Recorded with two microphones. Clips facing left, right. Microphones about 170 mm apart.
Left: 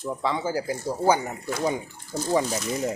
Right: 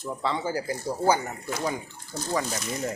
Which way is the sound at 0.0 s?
10° left (ahead or behind).